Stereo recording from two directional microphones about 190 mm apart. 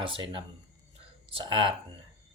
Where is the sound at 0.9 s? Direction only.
25° right (ahead or behind).